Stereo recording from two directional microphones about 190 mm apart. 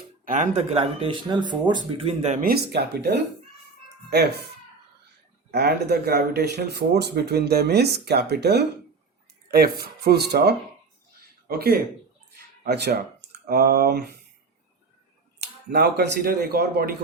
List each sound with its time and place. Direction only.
0.3 s speech: 35° right (ahead or behind)
2.4 s speech: 55° right (ahead or behind)
5.5 s speech: 55° right (ahead or behind)
15.4 s speech: 55° right (ahead or behind)